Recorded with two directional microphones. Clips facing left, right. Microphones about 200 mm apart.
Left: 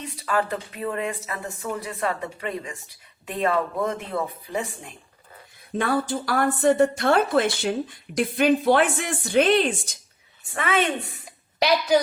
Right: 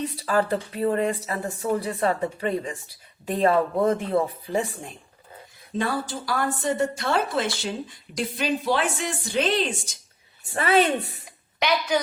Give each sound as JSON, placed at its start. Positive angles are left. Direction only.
{"t": 0.0, "sound": "speech", "side_deg": -35}
{"t": 5.7, "sound": "a woman's voice", "side_deg": 55}
{"t": 10.5, "sound": "speech", "side_deg": -35}